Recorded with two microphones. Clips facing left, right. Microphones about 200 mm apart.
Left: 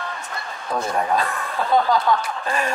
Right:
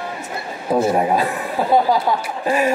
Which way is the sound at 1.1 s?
5° right (ahead or behind).